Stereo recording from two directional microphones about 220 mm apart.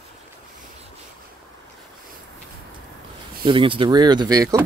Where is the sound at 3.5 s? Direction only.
25° right (ahead or behind).